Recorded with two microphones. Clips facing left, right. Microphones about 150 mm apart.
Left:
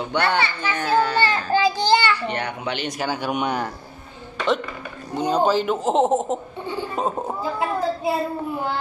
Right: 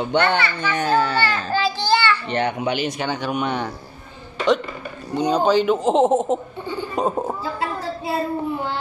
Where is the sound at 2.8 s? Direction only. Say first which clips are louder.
Right 1 dB; 5° left (ahead or behind).